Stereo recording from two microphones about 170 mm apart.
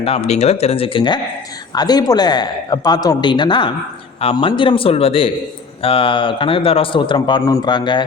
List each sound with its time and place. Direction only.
0.0 s a man's voice: 40° left (ahead or behind)